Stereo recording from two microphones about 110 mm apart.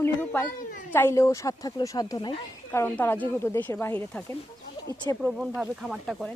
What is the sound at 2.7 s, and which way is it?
Speech, 20° left (ahead or behind).